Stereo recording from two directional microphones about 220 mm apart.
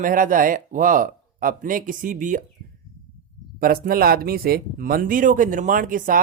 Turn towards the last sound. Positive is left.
turn(degrees=-40)  # may be behind; listen again after turning